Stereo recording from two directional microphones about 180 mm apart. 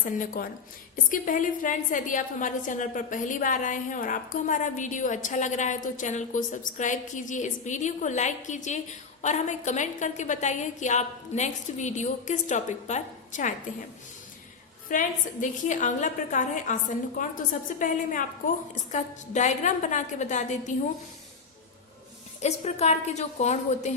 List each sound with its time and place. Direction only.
0.0 s a woman's voice: 50° left (ahead or behind)
14.8 s a woman's voice: 45° left (ahead or behind)
22.4 s a woman's voice: 40° left (ahead or behind)